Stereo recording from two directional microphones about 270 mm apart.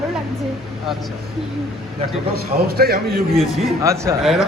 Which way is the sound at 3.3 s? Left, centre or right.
Centre.